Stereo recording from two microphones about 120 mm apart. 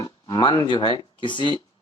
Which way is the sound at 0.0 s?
30° left (ahead or behind).